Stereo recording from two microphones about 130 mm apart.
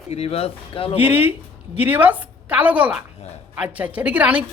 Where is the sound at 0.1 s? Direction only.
50° left (ahead or behind).